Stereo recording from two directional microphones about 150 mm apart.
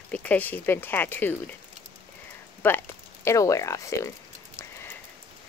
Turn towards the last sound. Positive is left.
turn(degrees=20)  # may be behind; listen again after turning